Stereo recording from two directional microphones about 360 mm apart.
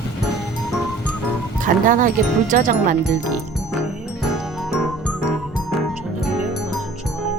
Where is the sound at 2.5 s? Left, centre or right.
Right.